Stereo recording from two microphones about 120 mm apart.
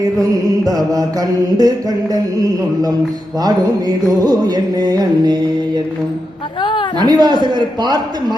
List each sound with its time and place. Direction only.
0.0 s music: 30° right (ahead or behind)
3.4 s music: 30° right (ahead or behind)
6.6 s a woman's voice: 40° left (ahead or behind)
7.0 s music: 35° right (ahead or behind)